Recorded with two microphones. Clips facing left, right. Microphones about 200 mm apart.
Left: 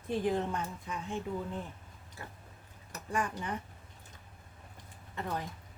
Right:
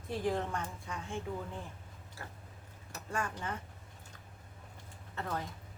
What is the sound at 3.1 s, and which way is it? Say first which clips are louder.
Speech: left 3 dB; 15° left (ahead or behind).